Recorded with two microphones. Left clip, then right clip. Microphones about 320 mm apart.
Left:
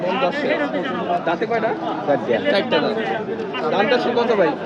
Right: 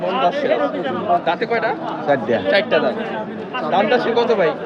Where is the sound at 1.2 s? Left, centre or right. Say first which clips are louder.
Right 1 dB; right.